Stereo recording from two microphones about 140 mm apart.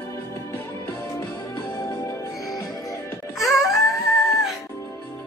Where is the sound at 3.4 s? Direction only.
Centre (ahead or behind).